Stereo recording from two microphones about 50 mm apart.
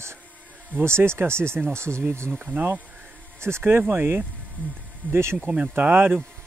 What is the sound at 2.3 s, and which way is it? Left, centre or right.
Speech, right.